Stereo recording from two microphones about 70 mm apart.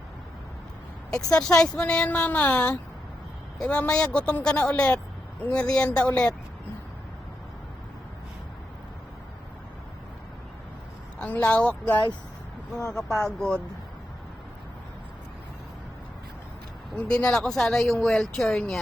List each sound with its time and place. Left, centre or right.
1.1 s a woman's voice: centre
11.2 s a woman's voice: left
12.9 s a woman's voice: centre
17.1 s a woman's voice: centre